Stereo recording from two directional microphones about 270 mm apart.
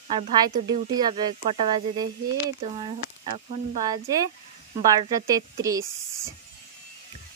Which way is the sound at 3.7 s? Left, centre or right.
Centre.